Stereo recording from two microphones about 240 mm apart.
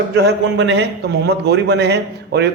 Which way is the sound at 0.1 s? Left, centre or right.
Right.